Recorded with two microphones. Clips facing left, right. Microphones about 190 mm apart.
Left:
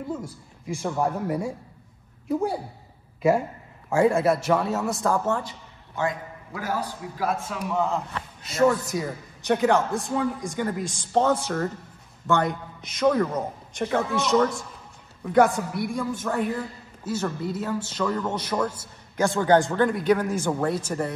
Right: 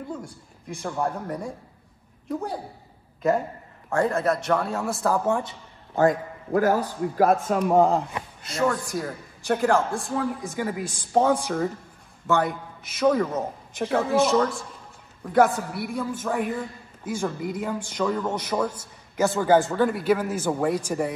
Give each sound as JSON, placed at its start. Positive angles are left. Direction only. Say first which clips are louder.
{"t": 0.8, "sound": "speech", "louder": "left 2 dB", "side_deg": 5}
{"t": 3.2, "sound": "a woman's voice", "louder": "left 2 dB", "side_deg": 10}
{"t": 5.9, "sound": "a man's voice", "louder": "right 7 dB", "side_deg": -50}
{"t": 8.5, "sound": "a man's voice", "louder": "left 4 dB", "side_deg": 5}